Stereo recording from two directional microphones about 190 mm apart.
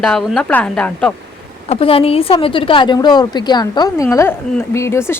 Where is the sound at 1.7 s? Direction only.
30° left (ahead or behind).